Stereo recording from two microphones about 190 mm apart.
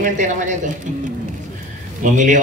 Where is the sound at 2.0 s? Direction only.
40° right (ahead or behind).